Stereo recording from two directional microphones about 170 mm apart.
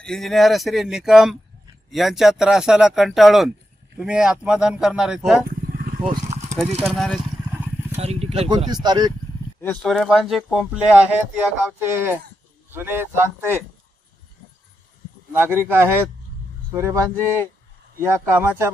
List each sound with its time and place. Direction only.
0.0 s speech: centre (ahead or behind)
6.8 s speech: centre (ahead or behind)
7.9 s vehicle: 40° right (ahead or behind)
8.4 s speech: 25° right (ahead or behind)
9.8 s speech: centre (ahead or behind)
15.3 s speech: 10° right (ahead or behind)